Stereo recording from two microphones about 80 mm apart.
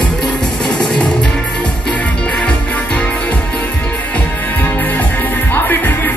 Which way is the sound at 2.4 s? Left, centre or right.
Centre.